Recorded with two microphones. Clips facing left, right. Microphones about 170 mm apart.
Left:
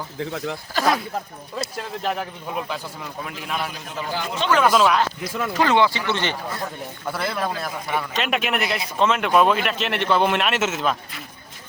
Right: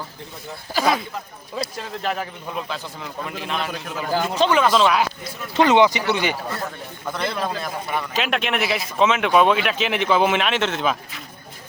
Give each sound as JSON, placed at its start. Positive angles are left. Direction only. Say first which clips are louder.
{"t": 0.2, "sound": "speech", "louder": "left 10 dB", "side_deg": 90}
{"t": 0.7, "sound": "a man's voice", "louder": "right 1 dB", "side_deg": -5}
{"t": 1.8, "sound": "a man's voice", "louder": "left 2 dB", "side_deg": 5}
{"t": 4.1, "sound": "speech", "louder": "right 5 dB", "side_deg": -40}
{"t": 4.6, "sound": "speech", "louder": "even", "side_deg": 5}
{"t": 5.5, "sound": "speech", "louder": "right 4 dB", "side_deg": -20}
{"t": 7.1, "sound": "a man's voice", "louder": "right 1 dB", "side_deg": 5}